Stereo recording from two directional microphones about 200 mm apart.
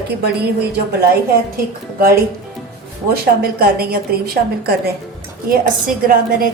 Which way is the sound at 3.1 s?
50° right (ahead or behind).